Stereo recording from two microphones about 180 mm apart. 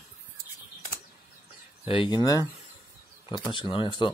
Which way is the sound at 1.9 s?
30° left (ahead or behind).